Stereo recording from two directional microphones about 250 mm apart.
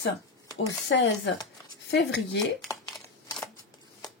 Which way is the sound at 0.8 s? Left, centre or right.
Left.